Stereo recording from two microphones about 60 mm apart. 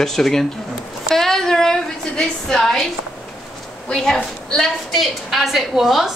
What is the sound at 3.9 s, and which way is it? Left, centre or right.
A woman's voice, centre.